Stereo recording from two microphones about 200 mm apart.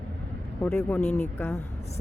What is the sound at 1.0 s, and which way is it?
Music, 35° left (ahead or behind).